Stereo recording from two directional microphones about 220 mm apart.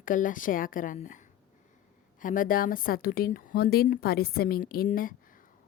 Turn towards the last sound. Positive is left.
turn(degrees=40)  # may be behind; listen again after turning